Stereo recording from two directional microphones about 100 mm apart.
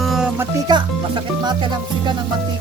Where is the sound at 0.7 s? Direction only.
45° right (ahead or behind).